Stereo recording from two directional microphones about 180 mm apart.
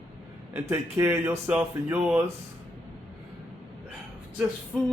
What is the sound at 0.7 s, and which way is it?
Speech, 15° right (ahead or behind).